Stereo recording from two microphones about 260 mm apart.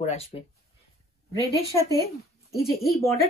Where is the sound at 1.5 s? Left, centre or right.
Centre.